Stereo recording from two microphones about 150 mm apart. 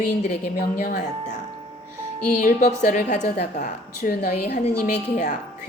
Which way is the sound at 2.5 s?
60° left (ahead or behind).